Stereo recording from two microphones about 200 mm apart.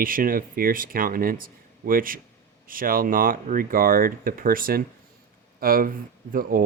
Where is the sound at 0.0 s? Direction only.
45° right (ahead or behind).